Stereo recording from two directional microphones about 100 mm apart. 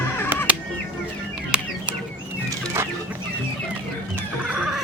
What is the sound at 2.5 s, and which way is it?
Chicken, 25° right (ahead or behind).